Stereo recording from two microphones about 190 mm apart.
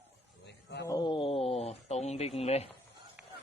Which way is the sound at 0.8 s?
20° left (ahead or behind).